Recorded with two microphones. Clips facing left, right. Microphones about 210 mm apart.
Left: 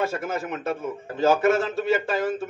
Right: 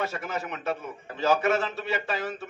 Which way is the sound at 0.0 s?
50° left (ahead or behind).